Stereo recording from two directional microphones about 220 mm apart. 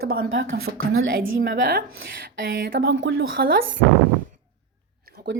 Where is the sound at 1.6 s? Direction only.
40° right (ahead or behind).